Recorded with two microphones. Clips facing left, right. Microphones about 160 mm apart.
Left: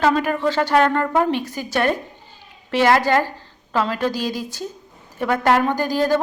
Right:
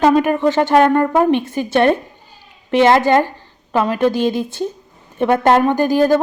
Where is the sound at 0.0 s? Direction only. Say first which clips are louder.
Right 5 dB; 20° right (ahead or behind).